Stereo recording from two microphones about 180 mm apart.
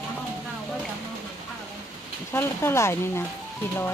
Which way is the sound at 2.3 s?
15° left (ahead or behind).